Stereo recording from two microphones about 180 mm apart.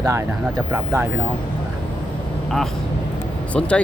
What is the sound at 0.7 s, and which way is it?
Speech, 10° right (ahead or behind).